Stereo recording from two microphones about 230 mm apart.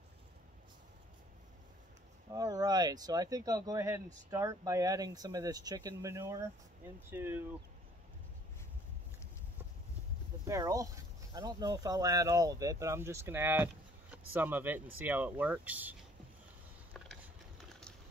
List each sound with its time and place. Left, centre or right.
2.3 s speech: centre
10.4 s speech: centre